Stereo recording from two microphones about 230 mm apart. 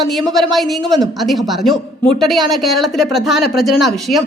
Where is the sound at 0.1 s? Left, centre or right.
Centre.